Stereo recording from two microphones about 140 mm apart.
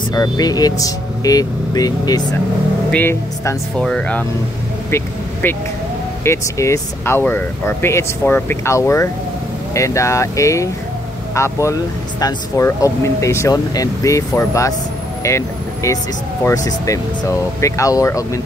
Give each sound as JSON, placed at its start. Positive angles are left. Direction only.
{"t": 0.1, "sound": "speech", "side_deg": 25}
{"t": 2.9, "sound": "speech", "side_deg": 15}